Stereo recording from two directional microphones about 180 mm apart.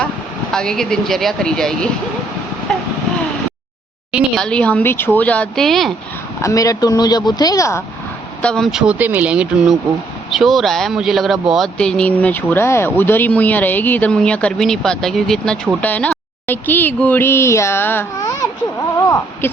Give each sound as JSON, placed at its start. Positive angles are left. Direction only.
{"t": 0.5, "sound": "speech", "side_deg": 5}
{"t": 2.7, "sound": "vehicle", "side_deg": 0}
{"t": 4.1, "sound": "speech", "side_deg": 0}
{"t": 6.4, "sound": "speech", "side_deg": 20}
{"t": 8.4, "sound": "speech", "side_deg": 5}